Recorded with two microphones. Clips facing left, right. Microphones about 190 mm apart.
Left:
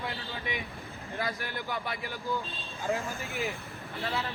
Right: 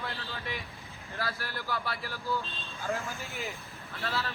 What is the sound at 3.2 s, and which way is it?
Speech, centre (ahead or behind).